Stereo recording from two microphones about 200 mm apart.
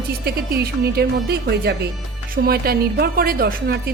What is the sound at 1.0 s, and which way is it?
A woman's voice, 50° right (ahead or behind).